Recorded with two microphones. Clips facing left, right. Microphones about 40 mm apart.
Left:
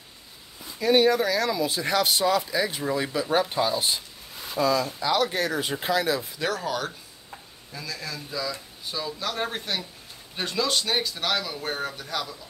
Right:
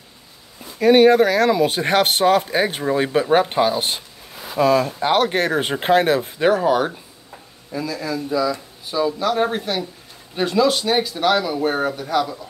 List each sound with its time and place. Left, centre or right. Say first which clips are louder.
0.7 s speech: right 8 dB; right
7.7 s speech: right 10 dB; centre